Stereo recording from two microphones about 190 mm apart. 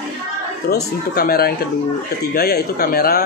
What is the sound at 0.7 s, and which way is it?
Speech, 55° left (ahead or behind).